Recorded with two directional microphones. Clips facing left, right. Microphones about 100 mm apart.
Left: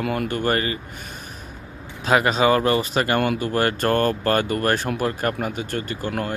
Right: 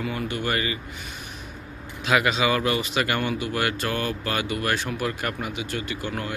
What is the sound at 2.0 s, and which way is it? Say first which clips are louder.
Speech: left 4 dB; 35° left (ahead or behind).